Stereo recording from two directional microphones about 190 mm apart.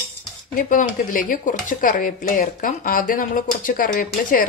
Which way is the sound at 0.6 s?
45° left (ahead or behind).